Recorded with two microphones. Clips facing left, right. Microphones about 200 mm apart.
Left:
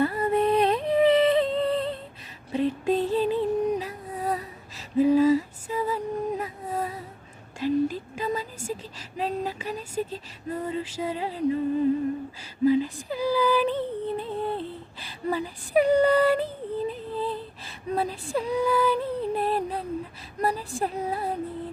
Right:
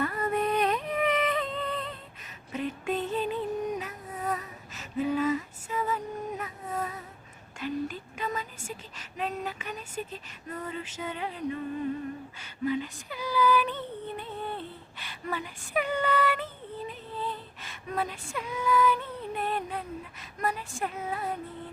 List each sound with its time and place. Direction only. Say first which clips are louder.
0.0 s music: left 6 dB; 30° left (ahead or behind)
7.6 s child singing: left 8 dB; 30° left (ahead or behind)
12.4 s female singing: left 8 dB; 30° left (ahead or behind)
20.4 s a sound: left 5 dB; 35° left (ahead or behind)